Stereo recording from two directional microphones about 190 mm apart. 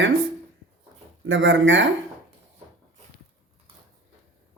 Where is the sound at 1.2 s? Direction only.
85° right.